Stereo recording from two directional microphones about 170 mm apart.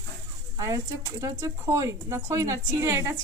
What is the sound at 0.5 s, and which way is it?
Speech, 20° right (ahead or behind).